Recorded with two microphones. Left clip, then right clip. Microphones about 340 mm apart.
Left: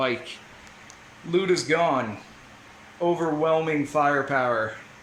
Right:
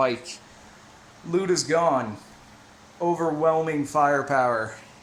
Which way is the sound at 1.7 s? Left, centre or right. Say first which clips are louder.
Right 1 dB; centre.